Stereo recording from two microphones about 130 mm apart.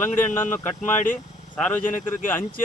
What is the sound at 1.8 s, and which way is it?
Speech, 85° left.